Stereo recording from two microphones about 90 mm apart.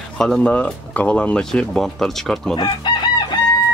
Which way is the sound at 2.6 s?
55° left (ahead or behind).